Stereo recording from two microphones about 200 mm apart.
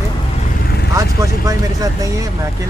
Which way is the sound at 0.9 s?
15° right (ahead or behind).